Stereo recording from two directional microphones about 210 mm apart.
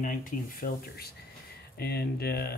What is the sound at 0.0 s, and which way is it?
Speech, 40° left (ahead or behind).